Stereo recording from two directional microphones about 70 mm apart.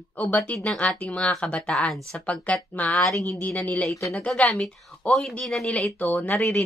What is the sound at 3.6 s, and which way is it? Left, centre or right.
Speech, left.